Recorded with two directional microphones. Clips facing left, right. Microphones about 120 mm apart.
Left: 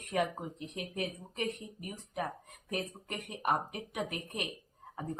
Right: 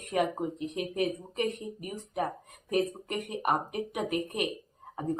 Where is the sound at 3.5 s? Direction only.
15° right (ahead or behind).